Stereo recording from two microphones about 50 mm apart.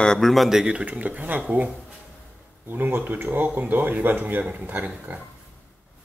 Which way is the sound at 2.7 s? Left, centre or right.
Right.